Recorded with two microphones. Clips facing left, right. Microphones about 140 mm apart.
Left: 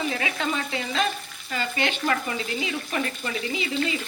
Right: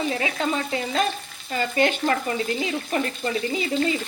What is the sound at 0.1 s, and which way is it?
Speech, 35° right (ahead or behind).